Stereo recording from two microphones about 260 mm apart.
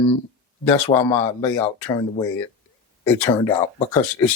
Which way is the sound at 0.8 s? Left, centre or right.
Centre.